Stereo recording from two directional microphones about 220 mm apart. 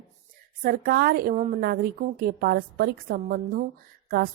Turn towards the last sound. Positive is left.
turn(degrees=-45)  # may be behind; listen again after turning